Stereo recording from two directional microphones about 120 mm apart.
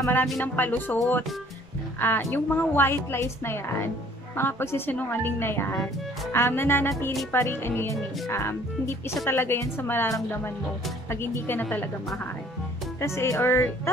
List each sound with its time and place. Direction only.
0.0 s a woman's voice: 15° left (ahead or behind)
2.0 s a woman's voice: 15° left (ahead or behind)
13.0 s a woman's voice: 25° left (ahead or behind)